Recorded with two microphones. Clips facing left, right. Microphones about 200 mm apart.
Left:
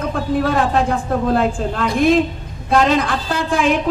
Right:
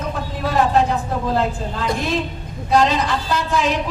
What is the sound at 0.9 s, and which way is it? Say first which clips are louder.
A man's voice: left 4 dB; 55° left (ahead or behind).